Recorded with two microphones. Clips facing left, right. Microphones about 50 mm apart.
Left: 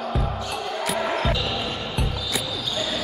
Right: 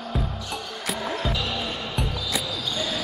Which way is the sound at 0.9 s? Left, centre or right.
Left.